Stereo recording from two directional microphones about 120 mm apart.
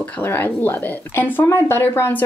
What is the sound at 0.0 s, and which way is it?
Speech, 15° left (ahead or behind).